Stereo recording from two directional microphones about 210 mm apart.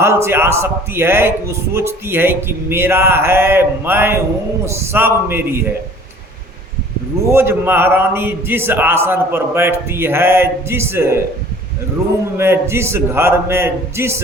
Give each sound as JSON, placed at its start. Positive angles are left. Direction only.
{"t": 0.0, "sound": "a man's voice", "side_deg": -10}
{"t": 7.3, "sound": "a man's voice", "side_deg": -10}
{"t": 12.4, "sound": "a man's voice", "side_deg": -10}